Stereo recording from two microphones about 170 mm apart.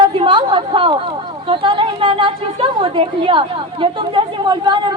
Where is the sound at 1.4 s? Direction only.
30° right (ahead or behind).